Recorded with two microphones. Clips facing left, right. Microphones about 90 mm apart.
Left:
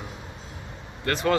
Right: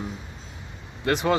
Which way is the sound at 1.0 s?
15° right (ahead or behind).